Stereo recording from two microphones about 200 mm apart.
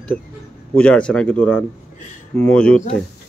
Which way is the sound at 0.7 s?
5° left (ahead or behind).